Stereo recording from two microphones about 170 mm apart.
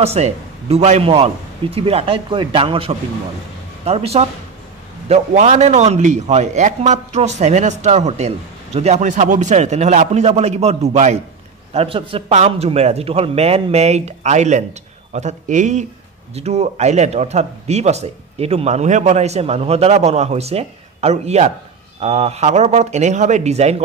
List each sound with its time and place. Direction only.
0.0 s a man's voice: 40° right (ahead or behind)